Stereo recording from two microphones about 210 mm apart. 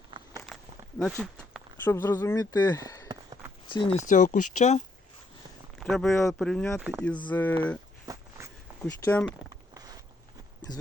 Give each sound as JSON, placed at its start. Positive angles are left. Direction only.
{"t": 0.1, "sound": "a sound", "side_deg": -25}
{"t": 0.4, "sound": "a sound", "side_deg": 0}
{"t": 1.8, "sound": "speech", "side_deg": 10}
{"t": 3.7, "sound": "speech", "side_deg": 35}
{"t": 5.8, "sound": "speech", "side_deg": 0}
{"t": 6.7, "sound": "speech", "side_deg": -5}
{"t": 7.3, "sound": "speech", "side_deg": 10}
{"t": 8.0, "sound": "walk", "side_deg": -15}
{"t": 8.8, "sound": "speech", "side_deg": 5}
{"t": 9.7, "sound": "a sound", "side_deg": -20}
{"t": 10.7, "sound": "speech", "side_deg": 20}